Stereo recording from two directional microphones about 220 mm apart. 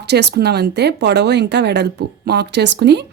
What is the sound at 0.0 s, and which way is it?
A woman's voice, 50° right (ahead or behind).